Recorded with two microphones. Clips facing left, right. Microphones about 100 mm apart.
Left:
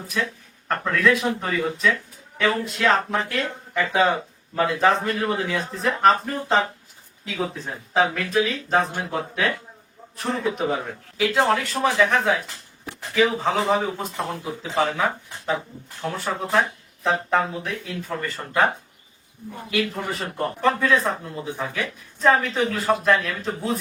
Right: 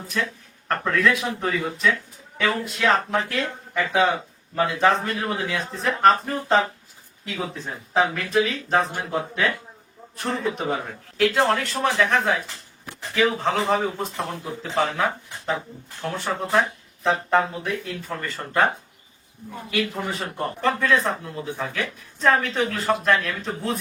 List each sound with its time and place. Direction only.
0.7 s speech: centre (ahead or behind)
19.7 s a man's voice: centre (ahead or behind)